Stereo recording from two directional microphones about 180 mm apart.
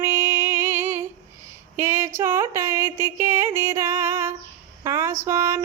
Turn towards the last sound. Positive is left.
turn(degrees=-15)  # may be behind; listen again after turning